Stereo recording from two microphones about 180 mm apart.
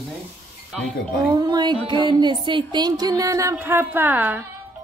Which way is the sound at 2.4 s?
25° right (ahead or behind).